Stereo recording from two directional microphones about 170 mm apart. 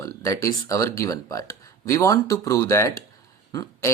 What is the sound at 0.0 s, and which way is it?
Speech, 20° left (ahead or behind).